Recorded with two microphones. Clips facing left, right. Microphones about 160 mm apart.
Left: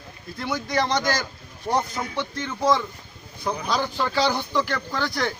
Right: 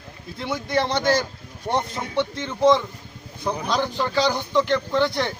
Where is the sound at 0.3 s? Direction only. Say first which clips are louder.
Right 1 dB; 25° right (ahead or behind).